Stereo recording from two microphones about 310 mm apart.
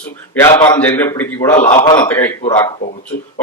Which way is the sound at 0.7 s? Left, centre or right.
Centre.